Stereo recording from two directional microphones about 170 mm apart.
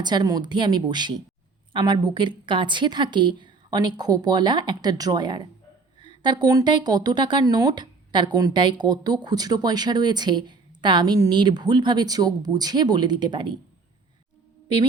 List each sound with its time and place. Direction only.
0.0 s a woman's voice: 25° right (ahead or behind)